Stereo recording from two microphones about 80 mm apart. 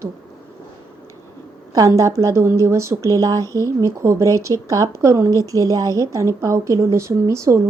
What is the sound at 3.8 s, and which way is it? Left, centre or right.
Speech, right.